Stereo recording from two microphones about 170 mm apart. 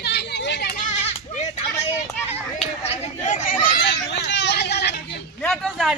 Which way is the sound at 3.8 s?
90° left.